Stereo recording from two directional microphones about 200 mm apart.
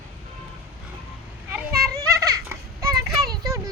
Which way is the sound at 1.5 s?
10° right (ahead or behind).